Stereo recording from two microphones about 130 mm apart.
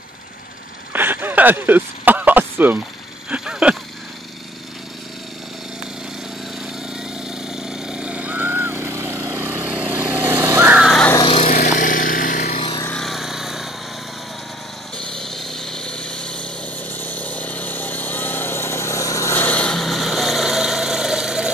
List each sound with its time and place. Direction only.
0.9 s a sound: 15° right (ahead or behind)
7.2 s vehicle: 5° right (ahead or behind)
10.8 s crow: centre (ahead or behind)
11.2 s vehicle: 50° left (ahead or behind)
11.5 s vehicle: 80° left
12.5 s vehicle: 40° left (ahead or behind)
12.9 s vehicle: centre (ahead or behind)
15.0 s vehicle: 5° left (ahead or behind)